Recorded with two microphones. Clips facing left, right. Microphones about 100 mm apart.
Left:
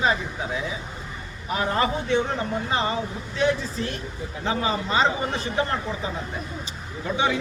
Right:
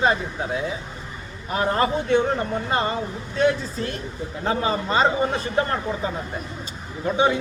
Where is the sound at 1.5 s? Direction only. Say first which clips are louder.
Right 3 dB; 40° right (ahead or behind).